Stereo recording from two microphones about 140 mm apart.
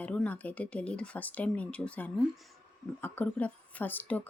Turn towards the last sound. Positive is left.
turn(degrees=10)  # may be behind; listen again after turning